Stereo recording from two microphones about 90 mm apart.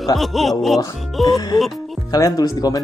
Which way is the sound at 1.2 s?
50° left (ahead or behind).